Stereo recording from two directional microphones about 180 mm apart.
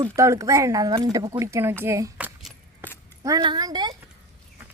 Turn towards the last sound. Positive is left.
turn(degrees=-25)  # may be behind; listen again after turning